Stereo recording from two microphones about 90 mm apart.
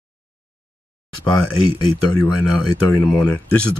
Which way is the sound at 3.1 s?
20° left (ahead or behind).